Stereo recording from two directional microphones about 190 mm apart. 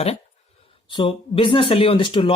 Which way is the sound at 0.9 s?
25° left (ahead or behind).